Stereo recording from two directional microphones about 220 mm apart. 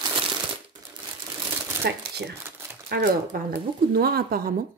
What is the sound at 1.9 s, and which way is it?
Speech, 50° right (ahead or behind).